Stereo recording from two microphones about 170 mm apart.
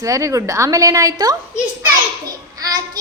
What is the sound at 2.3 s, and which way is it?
Child singing, 20° right (ahead or behind).